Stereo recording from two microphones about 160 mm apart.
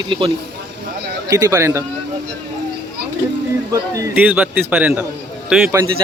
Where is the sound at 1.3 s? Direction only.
20° right (ahead or behind).